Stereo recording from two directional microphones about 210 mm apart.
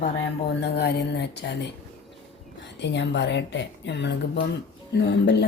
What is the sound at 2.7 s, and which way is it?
Music, 55° left (ahead or behind).